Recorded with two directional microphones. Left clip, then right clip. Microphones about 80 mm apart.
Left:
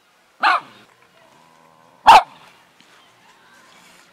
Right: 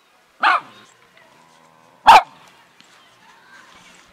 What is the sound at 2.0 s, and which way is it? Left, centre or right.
Dog, centre.